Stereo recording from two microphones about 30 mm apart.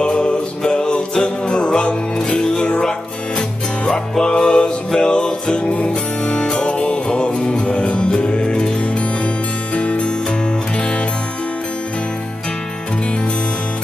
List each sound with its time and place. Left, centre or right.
0.0 s music: left
7.6 s music: left
8.3 s music: left
9.8 s music: left